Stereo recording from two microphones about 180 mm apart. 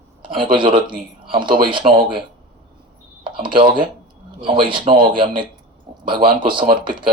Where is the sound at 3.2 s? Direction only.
25° right (ahead or behind).